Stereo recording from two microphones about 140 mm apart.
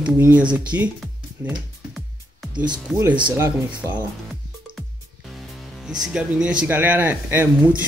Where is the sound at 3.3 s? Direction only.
20° right (ahead or behind).